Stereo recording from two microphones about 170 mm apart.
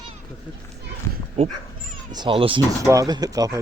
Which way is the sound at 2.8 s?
20° right (ahead or behind).